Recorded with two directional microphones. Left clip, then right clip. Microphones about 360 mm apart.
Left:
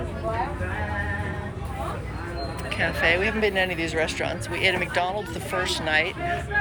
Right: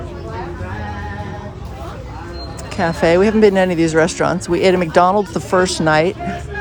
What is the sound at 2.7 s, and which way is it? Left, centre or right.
Speech, centre.